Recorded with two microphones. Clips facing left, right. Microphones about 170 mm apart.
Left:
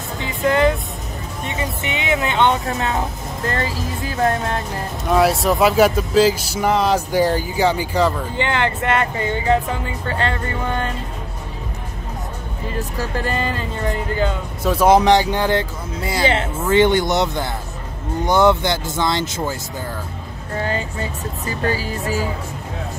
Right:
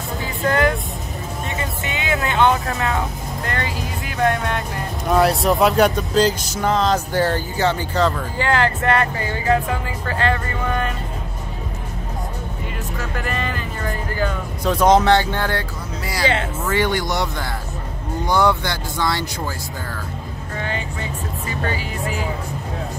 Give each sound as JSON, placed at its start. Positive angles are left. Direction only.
{"t": 0.2, "sound": "music", "side_deg": 20}
{"t": 5.0, "sound": "speech", "side_deg": 0}
{"t": 8.4, "sound": "speech", "side_deg": 20}
{"t": 12.7, "sound": "speech", "side_deg": 35}
{"t": 14.6, "sound": "speech", "side_deg": 5}
{"t": 20.5, "sound": "speech", "side_deg": 40}